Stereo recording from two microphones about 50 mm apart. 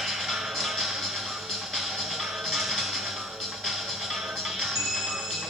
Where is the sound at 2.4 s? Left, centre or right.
Centre.